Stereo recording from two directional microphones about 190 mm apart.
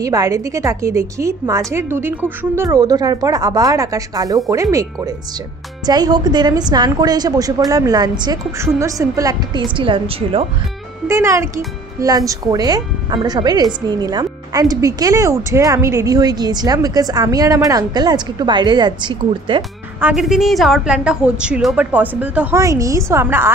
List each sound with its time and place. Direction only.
0.0 s a woman's voice: 15° right (ahead or behind)
11.1 s a woman's voice: 15° right (ahead or behind)
20.0 s a woman's voice: 5° right (ahead or behind)